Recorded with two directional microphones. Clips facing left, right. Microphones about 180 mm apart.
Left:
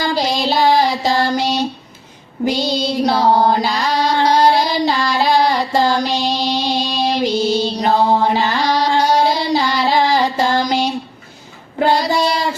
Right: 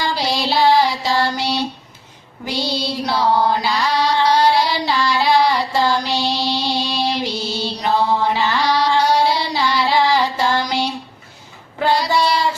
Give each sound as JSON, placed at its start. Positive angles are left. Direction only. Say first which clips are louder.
{"t": 0.0, "sound": "child singing", "louder": "left 3 dB", "side_deg": 45}
{"t": 2.4, "sound": "a sound", "louder": "left 7 dB", "side_deg": 45}
{"t": 2.6, "sound": "music", "louder": "left 4 dB", "side_deg": 20}
{"t": 3.0, "sound": "female singing", "louder": "left 3 dB", "side_deg": 45}
{"t": 11.9, "sound": "child singing", "louder": "left 1 dB", "side_deg": 45}